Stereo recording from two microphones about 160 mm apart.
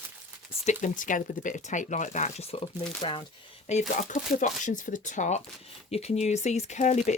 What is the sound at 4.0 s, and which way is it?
Speech, 50° left (ahead or behind).